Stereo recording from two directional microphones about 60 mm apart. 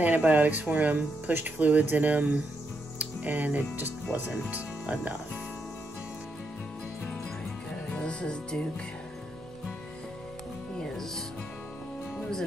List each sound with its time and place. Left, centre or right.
0.0 s speech: right
3.0 s music: right
3.7 s speech: right
7.9 s music: centre
10.8 s music: centre